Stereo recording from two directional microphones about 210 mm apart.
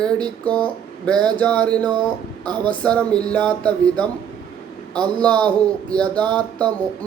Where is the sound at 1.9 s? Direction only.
20° right (ahead or behind).